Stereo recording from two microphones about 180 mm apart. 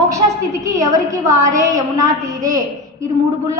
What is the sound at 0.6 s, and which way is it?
A woman's voice, 20° right (ahead or behind).